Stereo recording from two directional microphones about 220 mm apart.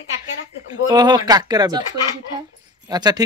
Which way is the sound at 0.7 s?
15° right (ahead or behind).